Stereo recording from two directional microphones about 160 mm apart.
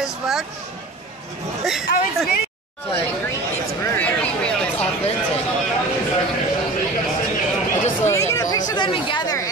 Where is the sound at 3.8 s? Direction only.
10° left (ahead or behind).